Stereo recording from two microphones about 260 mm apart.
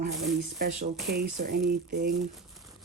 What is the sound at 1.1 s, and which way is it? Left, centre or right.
Speech, right.